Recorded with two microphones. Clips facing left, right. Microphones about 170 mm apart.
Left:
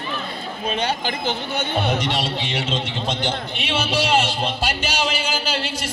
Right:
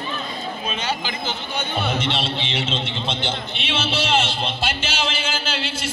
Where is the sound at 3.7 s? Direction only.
10° left (ahead or behind).